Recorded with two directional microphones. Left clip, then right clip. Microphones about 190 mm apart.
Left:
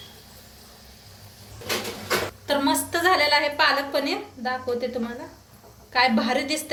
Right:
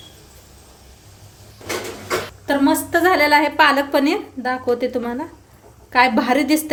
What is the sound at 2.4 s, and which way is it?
A woman's voice, 40° right (ahead or behind).